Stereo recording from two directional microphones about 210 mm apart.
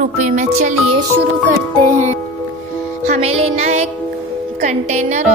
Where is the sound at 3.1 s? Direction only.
30° right (ahead or behind).